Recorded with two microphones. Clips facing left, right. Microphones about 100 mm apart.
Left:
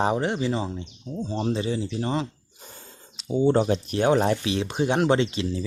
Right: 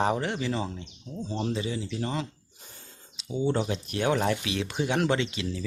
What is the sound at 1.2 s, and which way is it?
Speech, 30° left (ahead or behind).